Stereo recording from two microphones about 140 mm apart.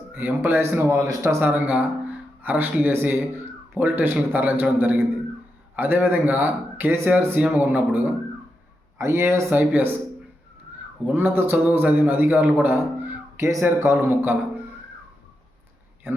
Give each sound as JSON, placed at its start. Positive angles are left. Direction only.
{"t": 0.1, "sound": "a man's voice", "side_deg": -15}
{"t": 11.0, "sound": "a man's voice", "side_deg": -15}